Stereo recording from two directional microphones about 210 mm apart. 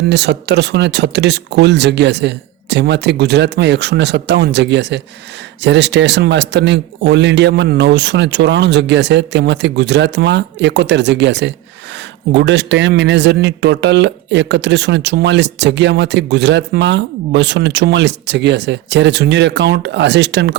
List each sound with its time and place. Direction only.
0.1 s a man's voice: 55° right (ahead or behind)